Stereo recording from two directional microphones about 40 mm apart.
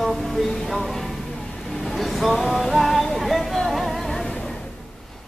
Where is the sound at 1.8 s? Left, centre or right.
Centre.